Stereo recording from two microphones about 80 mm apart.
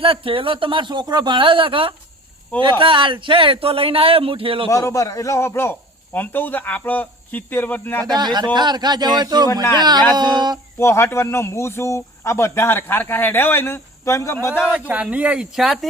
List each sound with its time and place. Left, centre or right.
0.0 s speech: right
4.7 s a man's voice: left
8.0 s a man's voice: right
10.8 s a man's voice: left
14.6 s speech: centre
15.5 s speech: centre